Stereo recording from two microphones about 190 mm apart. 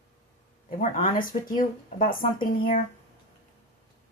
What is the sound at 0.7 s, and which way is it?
Speech, 45° left (ahead or behind).